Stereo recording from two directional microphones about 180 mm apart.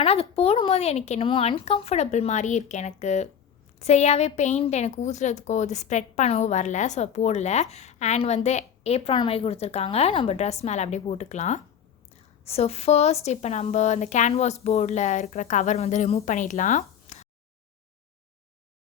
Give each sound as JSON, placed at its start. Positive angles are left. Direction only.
{"t": 0.0, "sound": "a woman's voice", "side_deg": 35}